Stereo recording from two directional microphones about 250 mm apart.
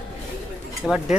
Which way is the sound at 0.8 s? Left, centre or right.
Centre.